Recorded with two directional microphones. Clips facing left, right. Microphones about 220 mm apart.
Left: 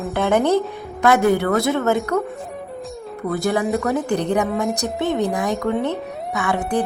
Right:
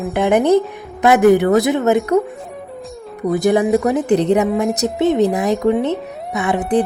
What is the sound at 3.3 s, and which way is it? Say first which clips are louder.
A woman's voice: right 6 dB; 20° right (ahead or behind).